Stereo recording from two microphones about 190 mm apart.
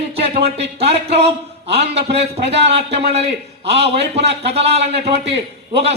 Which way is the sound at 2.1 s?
30° right (ahead or behind).